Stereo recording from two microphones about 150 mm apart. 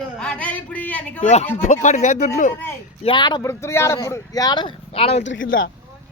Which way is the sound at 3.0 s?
30° left (ahead or behind).